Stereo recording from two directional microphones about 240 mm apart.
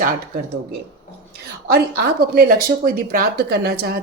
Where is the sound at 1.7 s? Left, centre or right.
Right.